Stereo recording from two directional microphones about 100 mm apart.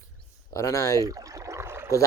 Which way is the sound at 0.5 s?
35° left (ahead or behind).